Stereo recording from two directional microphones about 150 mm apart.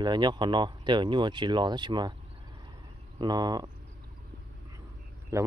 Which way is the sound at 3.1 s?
25° right (ahead or behind).